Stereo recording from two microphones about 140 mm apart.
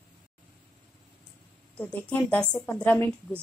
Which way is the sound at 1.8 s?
10° left (ahead or behind).